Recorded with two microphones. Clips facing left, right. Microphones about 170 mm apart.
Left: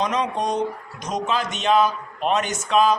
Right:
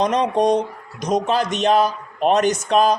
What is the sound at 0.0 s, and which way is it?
Speech, 35° right (ahead or behind).